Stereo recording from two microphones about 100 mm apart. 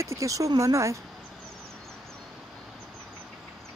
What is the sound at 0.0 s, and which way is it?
Speech, 30° right (ahead or behind).